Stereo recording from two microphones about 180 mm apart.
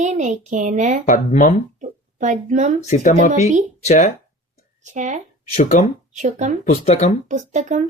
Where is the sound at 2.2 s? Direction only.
40° right (ahead or behind).